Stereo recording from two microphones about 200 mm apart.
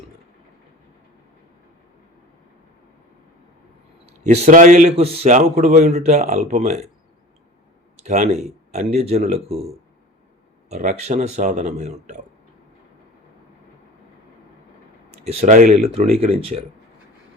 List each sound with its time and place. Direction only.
4.3 s a man's voice: 30° right (ahead or behind)
8.0 s a man's voice: 35° right (ahead or behind)
10.7 s a man's voice: 35° right (ahead or behind)
15.2 s a man's voice: 30° right (ahead or behind)